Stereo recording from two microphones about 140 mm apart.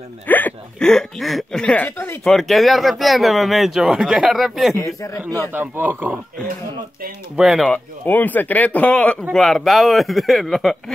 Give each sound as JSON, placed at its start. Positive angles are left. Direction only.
{"t": 0.3, "sound": "speech", "side_deg": 10}
{"t": 2.2, "sound": "speech", "side_deg": 0}
{"t": 4.7, "sound": "a man's voice", "side_deg": 25}
{"t": 5.5, "sound": "a man's voice", "side_deg": -15}
{"t": 7.3, "sound": "speech", "side_deg": 0}